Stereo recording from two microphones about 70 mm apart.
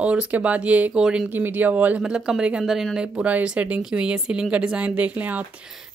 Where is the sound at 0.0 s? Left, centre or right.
Centre.